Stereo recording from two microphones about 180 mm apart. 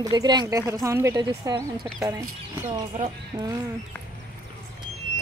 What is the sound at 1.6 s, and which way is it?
Speech, 5° left (ahead or behind).